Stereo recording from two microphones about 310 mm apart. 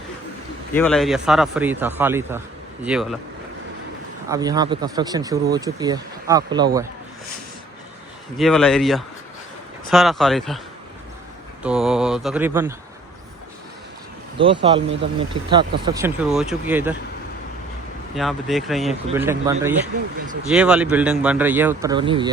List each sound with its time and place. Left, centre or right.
0.7 s a man's voice: centre
4.3 s speech: centre
8.4 s a man's voice: centre
11.6 s a man's voice: centre
14.4 s speech: centre
18.1 s a man's voice: centre